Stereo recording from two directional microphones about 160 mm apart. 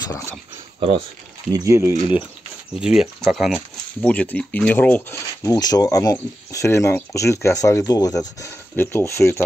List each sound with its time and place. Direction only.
0.7 s speech: 35° right (ahead or behind)
1.5 s speech: 20° right (ahead or behind)
2.7 s speech: 5° right (ahead or behind)
4.0 s speech: 10° left (ahead or behind)